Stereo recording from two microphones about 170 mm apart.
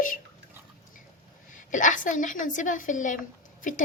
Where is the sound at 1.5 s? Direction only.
50° left (ahead or behind).